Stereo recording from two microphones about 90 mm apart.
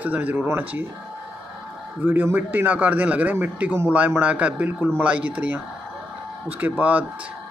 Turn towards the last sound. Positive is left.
turn(degrees=-15)  # may be behind; listen again after turning